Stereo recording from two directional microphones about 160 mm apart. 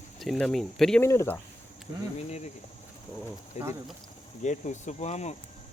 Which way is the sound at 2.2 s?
45° left (ahead or behind).